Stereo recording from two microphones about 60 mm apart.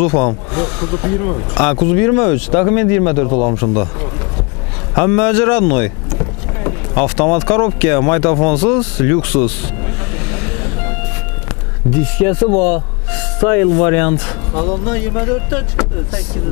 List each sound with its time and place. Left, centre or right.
0.0 s speech: centre
10.1 s train: centre
12.0 s speech: centre